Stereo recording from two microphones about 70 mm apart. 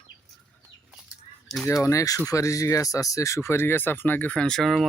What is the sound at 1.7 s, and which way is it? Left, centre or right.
Speech, left.